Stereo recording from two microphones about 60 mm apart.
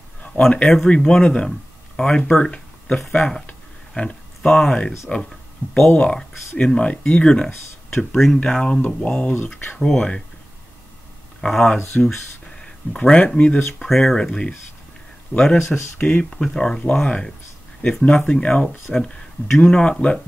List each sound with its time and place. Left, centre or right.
0.2 s speech: centre
9.8 s speech: centre
11.4 s speech: centre
13.6 s speech: centre
16.0 s speech: left
16.3 s speech: centre